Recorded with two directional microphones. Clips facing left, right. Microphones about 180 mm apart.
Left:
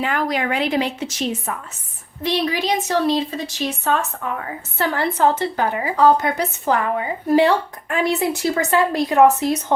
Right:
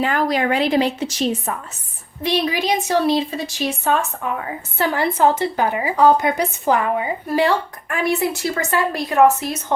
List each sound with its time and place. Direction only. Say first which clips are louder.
0.0 s a woman's voice: right 3 dB; 35° right (ahead or behind)
2.2 s a woman's voice: right 1 dB; 15° right (ahead or behind)
7.3 s a woman's voice: left 4 dB; 20° left (ahead or behind)